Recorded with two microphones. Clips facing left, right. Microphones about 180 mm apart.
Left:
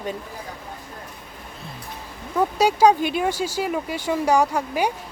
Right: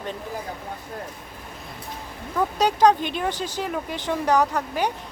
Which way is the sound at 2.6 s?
10° left (ahead or behind).